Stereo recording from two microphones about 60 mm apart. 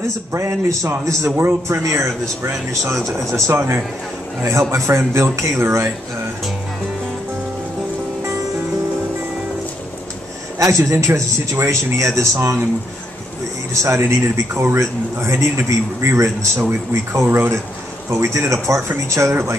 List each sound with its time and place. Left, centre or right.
0.3 s a man's voice: right
3.4 s a man's voice: right
10.6 s a man's voice: right
13.8 s a man's voice: right